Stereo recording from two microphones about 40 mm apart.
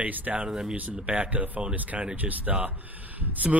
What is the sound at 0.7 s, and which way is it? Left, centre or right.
Speech, right.